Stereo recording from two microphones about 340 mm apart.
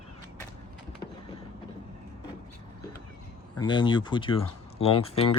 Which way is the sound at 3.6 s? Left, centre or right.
Centre.